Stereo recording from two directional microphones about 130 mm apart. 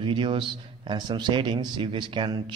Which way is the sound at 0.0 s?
40° right (ahead or behind).